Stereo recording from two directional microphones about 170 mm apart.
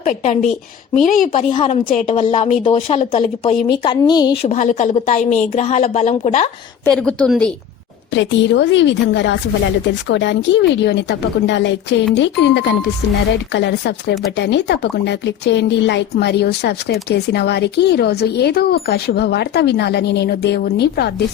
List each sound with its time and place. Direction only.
0.0 s a woman's voice: 45° left (ahead or behind)
1.0 s a woman's voice: 55° left (ahead or behind)
1.3 s a woman's voice: 35° left (ahead or behind)
1.8 s a woman's voice: 55° left (ahead or behind)
3.7 s a woman's voice: 25° left (ahead or behind)
4.4 s a woman's voice: 45° left (ahead or behind)
6.8 s a woman's voice: 5° left (ahead or behind)
8.1 s a woman's voice: 90° left; by 21.1 s 70° left (ahead or behind)